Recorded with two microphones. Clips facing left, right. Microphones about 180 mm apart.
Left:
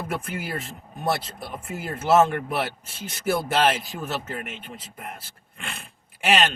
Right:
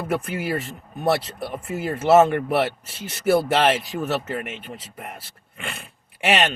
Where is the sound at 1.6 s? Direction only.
Centre (ahead or behind).